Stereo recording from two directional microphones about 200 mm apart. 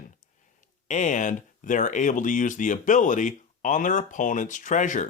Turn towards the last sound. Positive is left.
turn(degrees=40)  # may be behind; listen again after turning